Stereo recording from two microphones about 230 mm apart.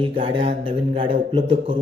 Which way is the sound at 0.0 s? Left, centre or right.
Right.